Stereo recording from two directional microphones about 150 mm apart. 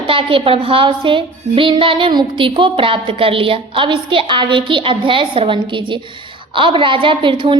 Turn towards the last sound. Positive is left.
turn(degrees=-35)  # may be behind; listen again after turning